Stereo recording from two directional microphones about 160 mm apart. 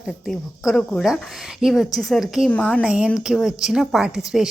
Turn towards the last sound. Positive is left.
turn(degrees=-5)  # may be behind; listen again after turning